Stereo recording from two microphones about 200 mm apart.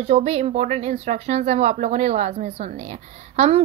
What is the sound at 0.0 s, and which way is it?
Speech, 30° right (ahead or behind).